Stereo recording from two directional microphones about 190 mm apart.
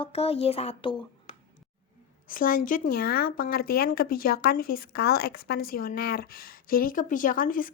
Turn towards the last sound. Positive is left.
turn(degrees=45)  # may be behind; listen again after turning